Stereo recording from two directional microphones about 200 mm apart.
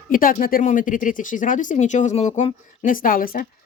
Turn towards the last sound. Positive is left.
turn(degrees=45)  # may be behind; listen again after turning